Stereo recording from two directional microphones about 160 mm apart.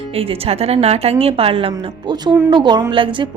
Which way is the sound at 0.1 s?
35° right (ahead or behind).